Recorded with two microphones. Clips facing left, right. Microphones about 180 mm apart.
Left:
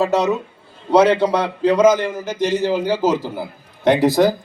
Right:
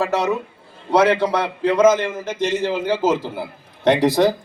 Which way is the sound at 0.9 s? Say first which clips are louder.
Left 3 dB; 10° left (ahead or behind).